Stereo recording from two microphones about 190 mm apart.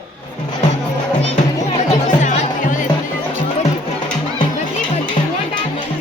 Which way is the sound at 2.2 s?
40° left (ahead or behind).